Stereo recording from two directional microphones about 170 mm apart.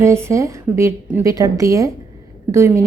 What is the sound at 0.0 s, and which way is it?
Speech, 15° right (ahead or behind).